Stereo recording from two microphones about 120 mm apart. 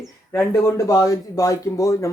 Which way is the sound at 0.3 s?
30° left (ahead or behind).